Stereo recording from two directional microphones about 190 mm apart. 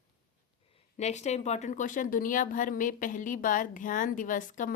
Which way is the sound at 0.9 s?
35° left (ahead or behind).